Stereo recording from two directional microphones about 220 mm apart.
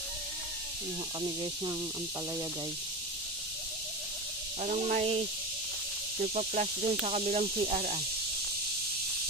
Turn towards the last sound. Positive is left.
turn(degrees=-30)  # may be behind; listen again after turning